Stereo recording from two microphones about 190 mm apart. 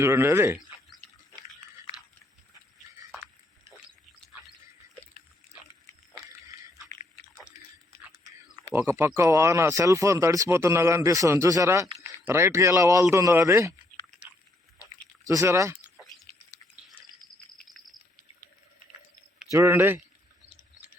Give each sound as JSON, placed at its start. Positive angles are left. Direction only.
{"t": 0.0, "sound": "speech", "side_deg": -15}
{"t": 8.7, "sound": "speech", "side_deg": -15}
{"t": 15.3, "sound": "speech", "side_deg": -15}
{"t": 17.7, "sound": "cricket", "side_deg": 0}
{"t": 19.5, "sound": "speech", "side_deg": -15}